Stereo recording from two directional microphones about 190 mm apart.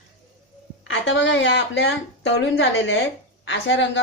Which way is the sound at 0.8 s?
75° left (ahead or behind).